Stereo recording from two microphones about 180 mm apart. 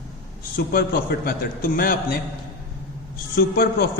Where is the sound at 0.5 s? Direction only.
55° left (ahead or behind).